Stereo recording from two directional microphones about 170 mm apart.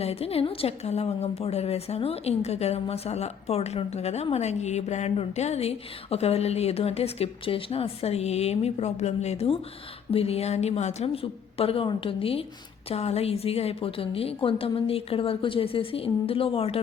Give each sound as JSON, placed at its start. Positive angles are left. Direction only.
{"t": 0.0, "sound": "a woman's voice", "side_deg": 35}